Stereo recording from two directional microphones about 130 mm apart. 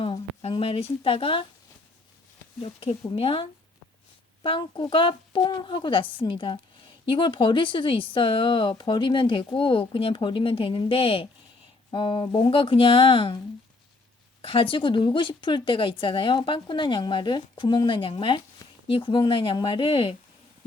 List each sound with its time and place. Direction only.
0.0 s a sound: 45° left (ahead or behind)
3.1 s speech: 45° left (ahead or behind)
4.4 s speech: 40° left (ahead or behind)
14.4 s speech: 40° left (ahead or behind)